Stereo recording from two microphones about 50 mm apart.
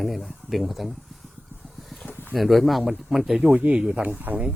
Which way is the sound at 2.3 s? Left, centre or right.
Centre.